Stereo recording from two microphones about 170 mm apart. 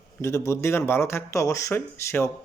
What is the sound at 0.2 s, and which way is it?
Speech, 15° left (ahead or behind).